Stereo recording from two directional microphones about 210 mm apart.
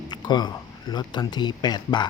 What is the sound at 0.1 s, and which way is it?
Speech, 20° left (ahead or behind).